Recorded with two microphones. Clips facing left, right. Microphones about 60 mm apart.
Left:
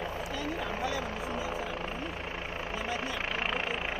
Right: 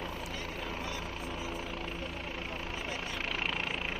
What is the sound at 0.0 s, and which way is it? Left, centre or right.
Vehicle, left.